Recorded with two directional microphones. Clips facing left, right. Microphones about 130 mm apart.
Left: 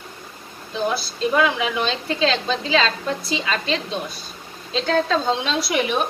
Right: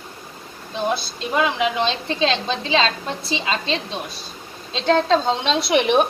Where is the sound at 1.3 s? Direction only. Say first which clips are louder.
Right 1 dB; 25° right (ahead or behind).